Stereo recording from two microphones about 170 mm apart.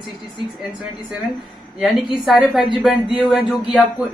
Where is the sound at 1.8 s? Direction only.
Centre (ahead or behind).